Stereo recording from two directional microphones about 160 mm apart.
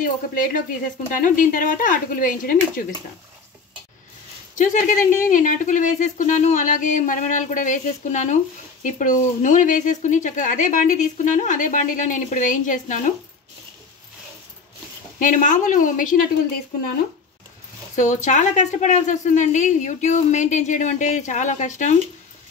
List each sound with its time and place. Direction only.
0.0 s speech: 60° left (ahead or behind)
4.6 s speech: 55° left (ahead or behind)
15.1 s speech: 55° left (ahead or behind)
17.9 s speech: 50° left (ahead or behind)